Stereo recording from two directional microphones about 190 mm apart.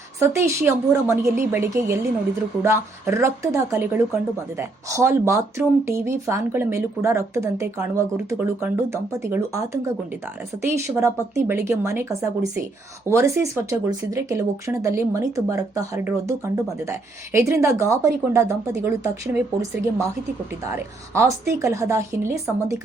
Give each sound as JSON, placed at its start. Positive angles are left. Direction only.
{"t": 0.2, "sound": "speech", "side_deg": -15}
{"t": 17.3, "sound": "speech", "side_deg": -15}
{"t": 20.7, "sound": "speech", "side_deg": -15}